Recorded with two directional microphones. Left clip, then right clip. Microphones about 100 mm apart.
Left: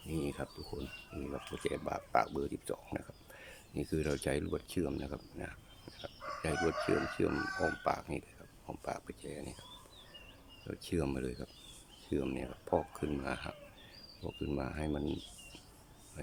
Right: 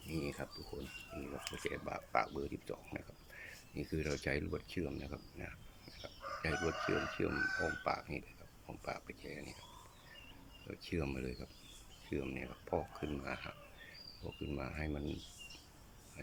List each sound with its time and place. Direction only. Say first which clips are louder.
0.1 s a sound: left 3 dB; 30° left (ahead or behind)
0.7 s speech: left 2 dB; 40° left (ahead or behind)
10.7 s speech: left 5 dB; 35° left (ahead or behind)